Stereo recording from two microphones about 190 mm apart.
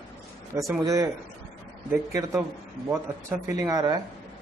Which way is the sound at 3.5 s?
20° right (ahead or behind).